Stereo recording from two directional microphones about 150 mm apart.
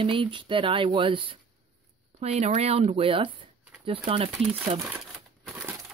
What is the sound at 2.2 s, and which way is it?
Speech, 45° right (ahead or behind).